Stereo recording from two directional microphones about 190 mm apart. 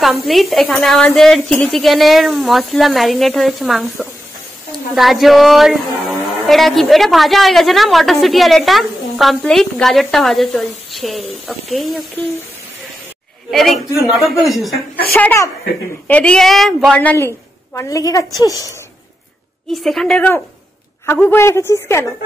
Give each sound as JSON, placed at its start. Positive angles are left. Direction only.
{"t": 0.0, "sound": "a woman's voice", "side_deg": 0}
{"t": 13.5, "sound": "a woman's voice", "side_deg": 0}
{"t": 15.1, "sound": "a woman's voice", "side_deg": 10}
{"t": 19.7, "sound": "a woman's voice", "side_deg": 0}